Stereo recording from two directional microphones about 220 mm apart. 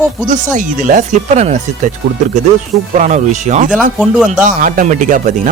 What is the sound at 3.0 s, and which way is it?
Speech, 30° right (ahead or behind).